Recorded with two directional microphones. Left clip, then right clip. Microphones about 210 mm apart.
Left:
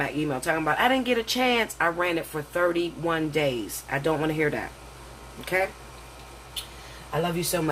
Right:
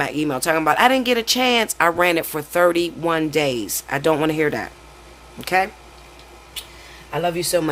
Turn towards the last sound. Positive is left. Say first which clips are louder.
# right 7 dB
turn(degrees=-55)  # may be behind; listen again after turning